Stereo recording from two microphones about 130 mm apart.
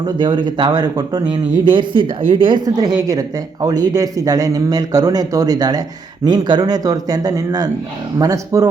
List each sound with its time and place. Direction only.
0.0 s speech: 35° right (ahead or behind)